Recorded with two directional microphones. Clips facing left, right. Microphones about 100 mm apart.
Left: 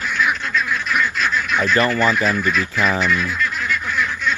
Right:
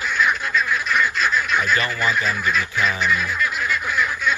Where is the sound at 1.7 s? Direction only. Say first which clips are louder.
Left 6 dB; 40° left (ahead or behind).